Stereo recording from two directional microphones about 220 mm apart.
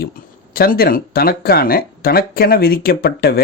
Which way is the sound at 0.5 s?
40° left (ahead or behind).